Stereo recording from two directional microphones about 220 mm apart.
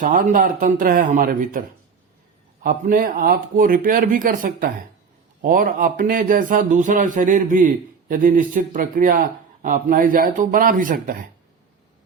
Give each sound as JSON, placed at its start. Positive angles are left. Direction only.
{"t": 0.0, "sound": "speech", "side_deg": -40}
{"t": 2.6, "sound": "speech", "side_deg": -40}